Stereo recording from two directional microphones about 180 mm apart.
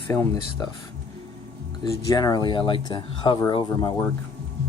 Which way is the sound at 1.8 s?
25° left (ahead or behind).